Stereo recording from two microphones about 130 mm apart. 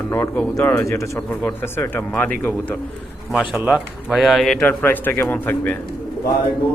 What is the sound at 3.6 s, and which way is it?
Speech, 10° right (ahead or behind).